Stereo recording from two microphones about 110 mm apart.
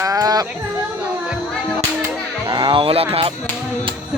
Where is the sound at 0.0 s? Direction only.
35° right (ahead or behind).